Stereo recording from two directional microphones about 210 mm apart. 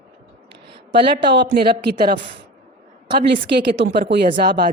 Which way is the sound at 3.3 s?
50° right (ahead or behind).